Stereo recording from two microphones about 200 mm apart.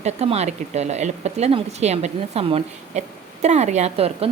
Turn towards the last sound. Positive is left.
turn(degrees=-30)  # may be behind; listen again after turning